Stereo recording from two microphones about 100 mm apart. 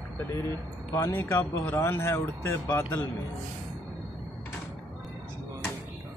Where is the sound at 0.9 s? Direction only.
25° left (ahead or behind).